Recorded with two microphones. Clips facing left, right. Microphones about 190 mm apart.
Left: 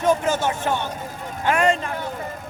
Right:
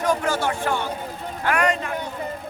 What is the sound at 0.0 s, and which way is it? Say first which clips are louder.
Speech: left 2 dB; 20° left (ahead or behind).